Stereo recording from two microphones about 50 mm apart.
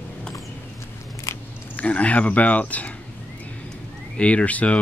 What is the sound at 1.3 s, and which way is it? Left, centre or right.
Biting, left.